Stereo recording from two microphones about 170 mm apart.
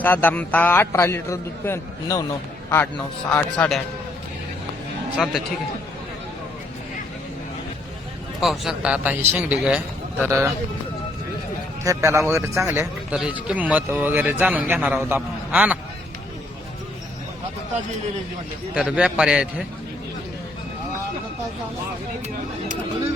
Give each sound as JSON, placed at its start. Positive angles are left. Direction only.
{"t": 0.0, "sound": "a man's voice", "side_deg": 10}
{"t": 5.1, "sound": "a man's voice", "side_deg": 0}
{"t": 8.4, "sound": "a man's voice", "side_deg": 0}
{"t": 11.8, "sound": "a man's voice", "side_deg": -15}
{"t": 18.7, "sound": "a man's voice", "side_deg": -5}